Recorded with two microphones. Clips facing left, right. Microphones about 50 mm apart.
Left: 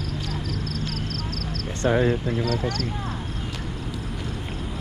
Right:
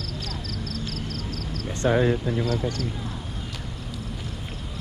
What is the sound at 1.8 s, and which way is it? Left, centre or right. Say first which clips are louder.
Speech: even; left.